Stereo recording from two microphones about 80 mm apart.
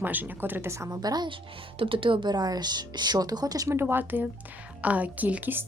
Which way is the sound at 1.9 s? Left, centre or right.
Right.